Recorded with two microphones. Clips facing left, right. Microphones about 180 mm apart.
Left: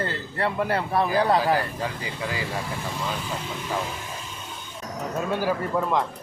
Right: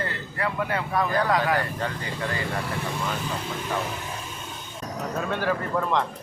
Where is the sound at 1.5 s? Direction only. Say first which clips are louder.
Even; 5° left (ahead or behind).